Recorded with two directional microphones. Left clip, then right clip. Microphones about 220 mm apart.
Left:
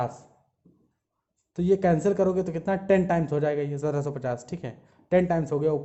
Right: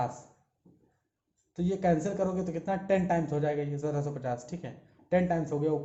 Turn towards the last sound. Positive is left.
turn(degrees=45)  # may be behind; listen again after turning